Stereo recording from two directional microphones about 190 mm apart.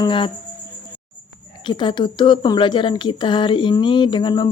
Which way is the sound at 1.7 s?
25° left (ahead or behind).